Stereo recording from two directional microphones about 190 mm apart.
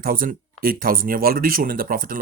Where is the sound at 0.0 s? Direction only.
50° right (ahead or behind).